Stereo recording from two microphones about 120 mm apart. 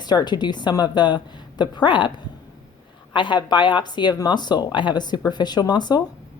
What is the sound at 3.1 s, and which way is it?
Speech, 40° left (ahead or behind).